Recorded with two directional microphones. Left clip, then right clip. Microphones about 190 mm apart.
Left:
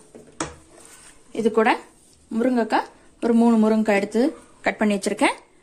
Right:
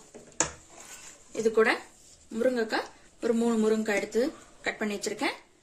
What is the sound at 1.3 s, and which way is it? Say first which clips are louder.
A woman's voice: left 5 dB; 40° left (ahead or behind).